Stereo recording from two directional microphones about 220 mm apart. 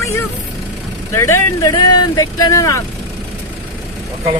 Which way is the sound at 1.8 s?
90° left.